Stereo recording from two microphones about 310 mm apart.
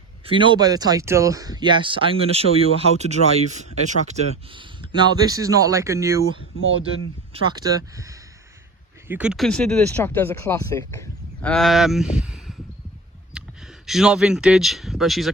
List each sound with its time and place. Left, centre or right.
0.3 s speech: centre